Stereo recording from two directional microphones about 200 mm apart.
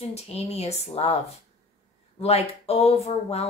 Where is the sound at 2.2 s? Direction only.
30° left (ahead or behind).